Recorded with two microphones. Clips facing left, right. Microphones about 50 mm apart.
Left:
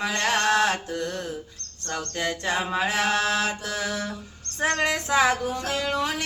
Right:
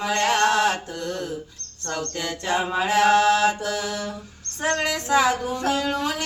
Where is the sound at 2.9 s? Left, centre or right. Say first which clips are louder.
Right 10 dB; centre.